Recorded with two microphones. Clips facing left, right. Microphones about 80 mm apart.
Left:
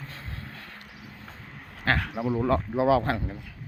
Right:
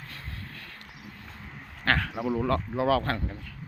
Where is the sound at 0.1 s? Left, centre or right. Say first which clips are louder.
Left 1 dB; left.